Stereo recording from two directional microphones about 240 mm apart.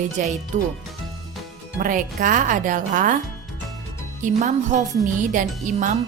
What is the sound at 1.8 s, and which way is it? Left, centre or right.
A woman's voice, right.